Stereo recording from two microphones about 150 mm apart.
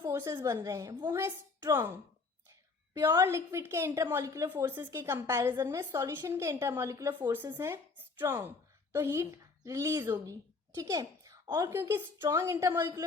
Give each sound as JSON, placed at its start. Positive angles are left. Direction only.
{"t": 0.1, "sound": "a woman's voice", "side_deg": -15}